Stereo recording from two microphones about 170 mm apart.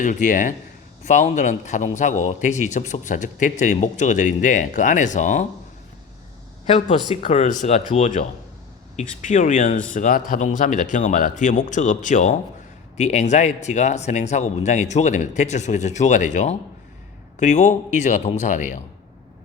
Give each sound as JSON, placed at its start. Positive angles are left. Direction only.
{"t": 0.0, "sound": "speech", "side_deg": 50}
{"t": 7.2, "sound": "speech", "side_deg": 40}